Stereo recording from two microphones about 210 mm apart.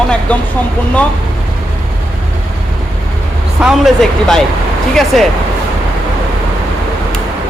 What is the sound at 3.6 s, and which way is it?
Speech, 5° right (ahead or behind).